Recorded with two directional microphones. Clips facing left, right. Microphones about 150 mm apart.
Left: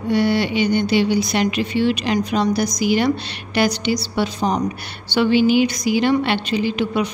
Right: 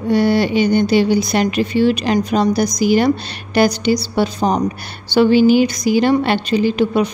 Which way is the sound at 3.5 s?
40° right (ahead or behind).